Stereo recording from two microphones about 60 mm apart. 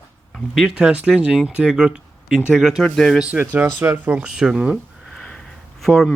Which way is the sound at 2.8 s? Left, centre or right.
Centre.